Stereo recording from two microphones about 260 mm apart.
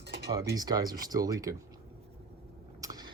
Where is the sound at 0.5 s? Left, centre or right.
Centre.